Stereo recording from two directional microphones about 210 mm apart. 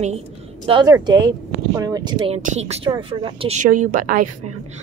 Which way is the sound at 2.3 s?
30° right (ahead or behind).